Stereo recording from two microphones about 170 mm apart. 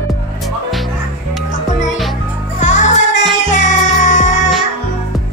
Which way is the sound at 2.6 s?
45° left (ahead or behind).